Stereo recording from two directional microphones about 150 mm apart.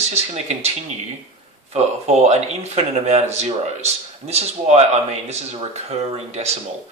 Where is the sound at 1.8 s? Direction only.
45° right (ahead or behind).